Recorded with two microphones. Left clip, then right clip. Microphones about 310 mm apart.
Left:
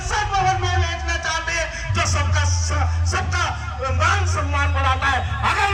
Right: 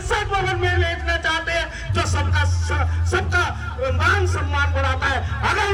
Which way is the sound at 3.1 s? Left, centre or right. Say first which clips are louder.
Right 3 dB; centre.